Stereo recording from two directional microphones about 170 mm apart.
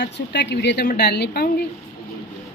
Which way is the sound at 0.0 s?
90° left.